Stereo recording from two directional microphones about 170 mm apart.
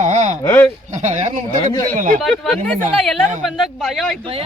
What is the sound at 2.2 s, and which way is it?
Speech, 5° left (ahead or behind).